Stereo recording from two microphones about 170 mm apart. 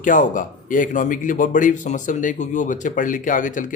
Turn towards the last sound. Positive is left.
turn(degrees=50)  # may be behind; listen again after turning